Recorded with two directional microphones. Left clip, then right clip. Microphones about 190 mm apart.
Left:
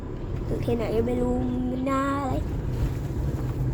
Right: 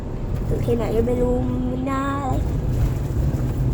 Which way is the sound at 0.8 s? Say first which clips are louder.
Right 2 dB; 15° left (ahead or behind).